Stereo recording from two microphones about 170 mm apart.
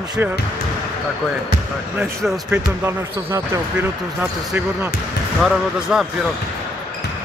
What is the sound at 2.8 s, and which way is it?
Speech, 15° right (ahead or behind).